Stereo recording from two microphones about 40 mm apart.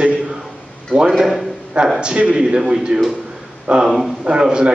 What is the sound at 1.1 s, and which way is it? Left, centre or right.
Speech, centre.